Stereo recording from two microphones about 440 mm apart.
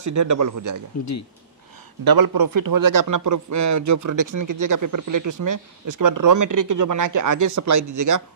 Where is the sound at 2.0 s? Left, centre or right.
Right.